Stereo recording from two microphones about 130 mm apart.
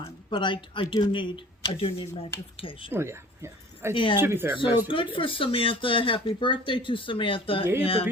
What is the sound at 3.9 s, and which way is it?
Speech, 40° left (ahead or behind).